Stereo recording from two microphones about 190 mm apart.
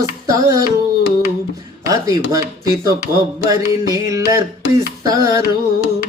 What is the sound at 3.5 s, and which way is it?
Music, 20° right (ahead or behind).